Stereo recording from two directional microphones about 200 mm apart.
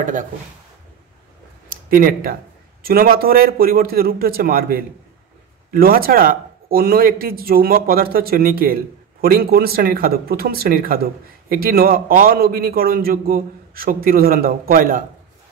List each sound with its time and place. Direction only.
0.0 s speech: 40° right (ahead or behind)
1.7 s a man's voice: 45° right (ahead or behind)